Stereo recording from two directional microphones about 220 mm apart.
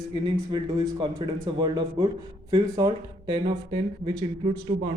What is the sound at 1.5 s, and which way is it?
A man's voice, 20° right (ahead or behind).